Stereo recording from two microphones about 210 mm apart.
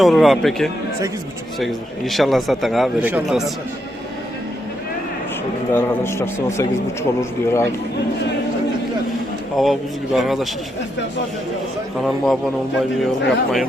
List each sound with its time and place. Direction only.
0.0 s a man's voice: centre (ahead or behind)
5.7 s a man's voice: 10° left (ahead or behind)
9.6 s a man's voice: centre (ahead or behind)
12.0 s a man's voice: centre (ahead or behind)